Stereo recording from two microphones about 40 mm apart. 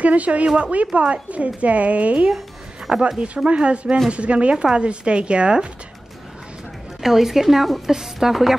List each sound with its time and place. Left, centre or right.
0.0 s a woman's voice: right
7.0 s speech: centre